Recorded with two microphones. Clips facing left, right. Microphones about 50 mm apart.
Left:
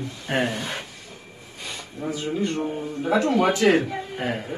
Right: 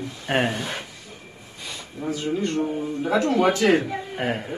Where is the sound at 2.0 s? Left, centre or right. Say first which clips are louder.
Right 1 dB; centre.